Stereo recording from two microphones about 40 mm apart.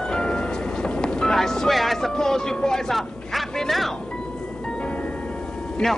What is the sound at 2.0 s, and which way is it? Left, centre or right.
Speech, centre.